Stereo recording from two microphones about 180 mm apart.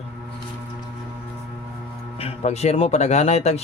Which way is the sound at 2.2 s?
35° left (ahead or behind).